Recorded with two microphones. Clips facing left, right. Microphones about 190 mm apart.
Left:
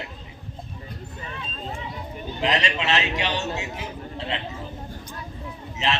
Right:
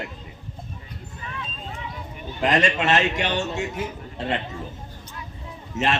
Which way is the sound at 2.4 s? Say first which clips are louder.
Right 4 dB; 50° right (ahead or behind).